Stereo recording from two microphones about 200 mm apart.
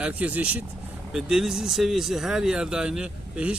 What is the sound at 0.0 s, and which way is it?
Speech, 5° right (ahead or behind).